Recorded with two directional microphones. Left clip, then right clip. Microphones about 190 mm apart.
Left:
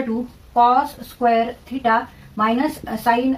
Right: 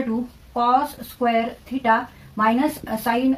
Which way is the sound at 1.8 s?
30° right (ahead or behind).